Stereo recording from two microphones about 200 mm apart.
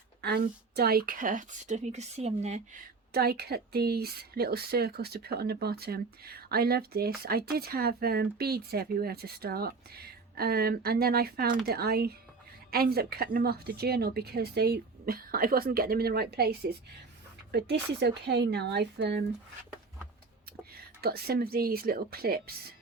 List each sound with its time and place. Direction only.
0.2 s a woman's voice: 55° right (ahead or behind); by 2.6 s 35° right (ahead or behind)
3.1 s speech: 50° right (ahead or behind)
21.0 s speech: 50° right (ahead or behind)